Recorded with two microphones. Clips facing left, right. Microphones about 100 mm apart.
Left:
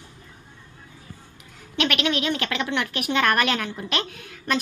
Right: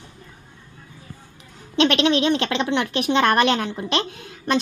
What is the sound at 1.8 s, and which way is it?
Speech, 25° right (ahead or behind).